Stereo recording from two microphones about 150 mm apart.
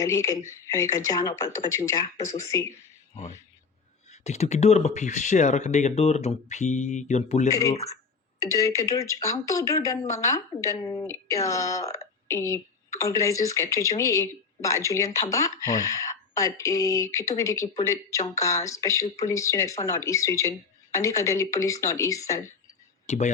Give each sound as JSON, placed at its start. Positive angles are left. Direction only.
{"t": 0.0, "sound": "speech", "side_deg": 20}
{"t": 4.1, "sound": "speech", "side_deg": 45}
{"t": 7.5, "sound": "speech", "side_deg": 20}
{"t": 23.0, "sound": "speech", "side_deg": 50}